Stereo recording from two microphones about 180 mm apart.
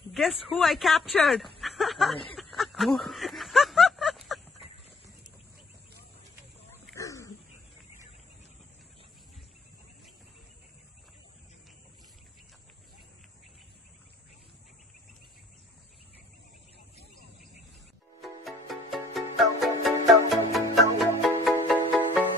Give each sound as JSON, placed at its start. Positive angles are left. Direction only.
{"t": 0.1, "sound": "speech", "side_deg": 0}
{"t": 2.3, "sound": "snicker", "side_deg": 0}
{"t": 7.0, "sound": "dog", "side_deg": 20}
{"t": 18.2, "sound": "music", "side_deg": 0}